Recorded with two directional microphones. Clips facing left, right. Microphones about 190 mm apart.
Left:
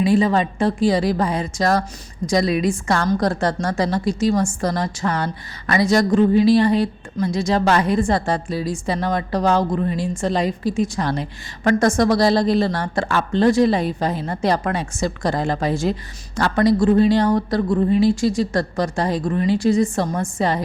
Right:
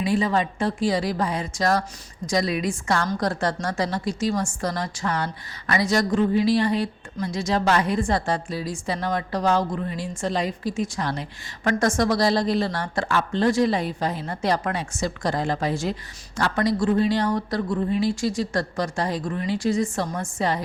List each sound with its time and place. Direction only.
0.0 s a woman's voice: 30° left (ahead or behind)